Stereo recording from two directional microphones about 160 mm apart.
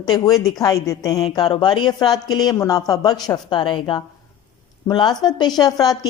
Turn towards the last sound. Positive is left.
turn(degrees=25)  # may be behind; listen again after turning